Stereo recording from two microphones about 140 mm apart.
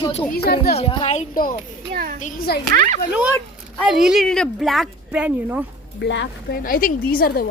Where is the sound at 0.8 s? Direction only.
50° left (ahead or behind).